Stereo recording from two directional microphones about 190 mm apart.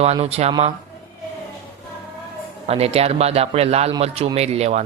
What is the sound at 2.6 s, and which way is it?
Speech, 30° right (ahead or behind).